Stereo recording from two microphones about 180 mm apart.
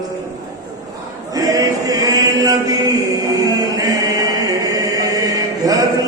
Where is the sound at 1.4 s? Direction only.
20° right (ahead or behind).